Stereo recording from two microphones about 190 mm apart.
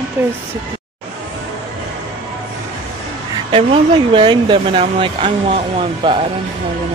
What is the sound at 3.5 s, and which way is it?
Speech, 25° right (ahead or behind).